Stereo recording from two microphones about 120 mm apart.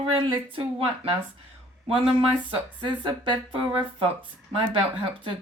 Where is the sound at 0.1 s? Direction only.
45° right (ahead or behind).